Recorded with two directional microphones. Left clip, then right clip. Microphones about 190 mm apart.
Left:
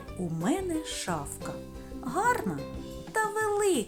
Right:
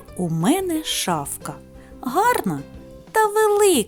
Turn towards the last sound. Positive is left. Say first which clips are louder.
# right 11 dB
turn(degrees=-60)  # may be behind; listen again after turning